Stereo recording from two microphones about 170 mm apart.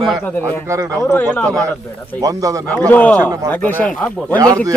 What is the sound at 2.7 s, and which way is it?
Speech, 10° left (ahead or behind).